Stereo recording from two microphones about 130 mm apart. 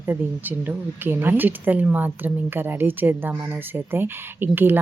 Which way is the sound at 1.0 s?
15° right (ahead or behind).